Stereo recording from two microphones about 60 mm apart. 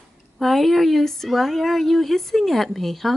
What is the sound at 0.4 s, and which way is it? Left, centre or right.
A woman's voice, centre.